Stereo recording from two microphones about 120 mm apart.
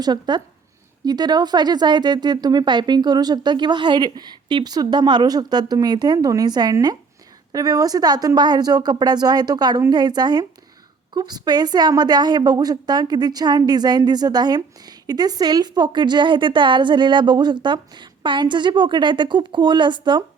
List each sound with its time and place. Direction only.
0.0 s a woman's voice: 35° right (ahead or behind)